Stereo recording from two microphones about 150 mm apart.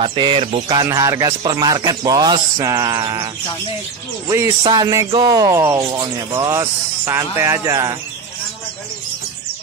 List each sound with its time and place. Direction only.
0.0 s speech: 35° right (ahead or behind)
0.7 s speech: 25° right (ahead or behind)
4.6 s speech: 25° right (ahead or behind)